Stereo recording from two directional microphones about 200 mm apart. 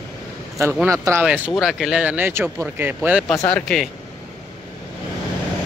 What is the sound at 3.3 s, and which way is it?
Speech, 15° left (ahead or behind).